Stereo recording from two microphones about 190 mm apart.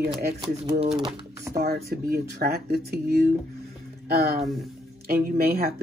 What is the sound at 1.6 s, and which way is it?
Speech, 55° right (ahead or behind).